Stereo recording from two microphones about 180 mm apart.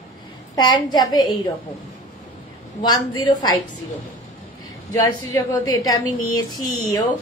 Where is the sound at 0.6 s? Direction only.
25° left (ahead or behind).